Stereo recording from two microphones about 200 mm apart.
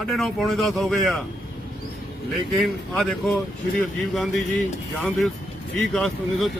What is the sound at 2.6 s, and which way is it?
Speech, 5° left (ahead or behind).